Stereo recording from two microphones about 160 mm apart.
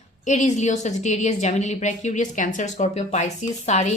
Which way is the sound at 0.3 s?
45° left (ahead or behind).